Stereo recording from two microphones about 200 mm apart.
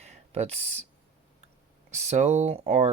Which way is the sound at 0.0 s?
30° right (ahead or behind).